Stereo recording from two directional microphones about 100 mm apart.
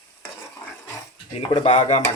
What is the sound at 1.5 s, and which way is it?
Speech, 65° left (ahead or behind).